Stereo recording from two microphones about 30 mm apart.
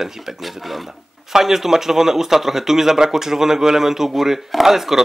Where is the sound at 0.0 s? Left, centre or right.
Centre.